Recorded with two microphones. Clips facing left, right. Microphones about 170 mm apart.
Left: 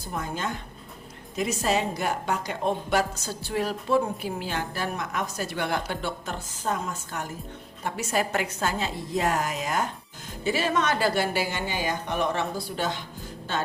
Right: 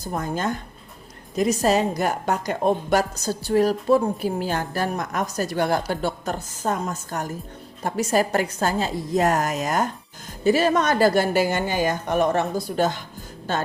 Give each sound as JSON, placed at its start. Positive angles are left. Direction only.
{"t": 0.0, "sound": "a woman's voice", "side_deg": -45}